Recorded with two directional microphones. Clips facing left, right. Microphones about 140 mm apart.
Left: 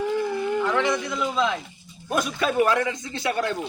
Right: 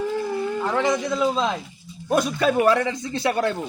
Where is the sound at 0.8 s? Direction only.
35° right (ahead or behind).